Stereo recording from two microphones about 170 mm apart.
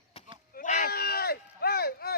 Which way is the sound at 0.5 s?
45° left (ahead or behind).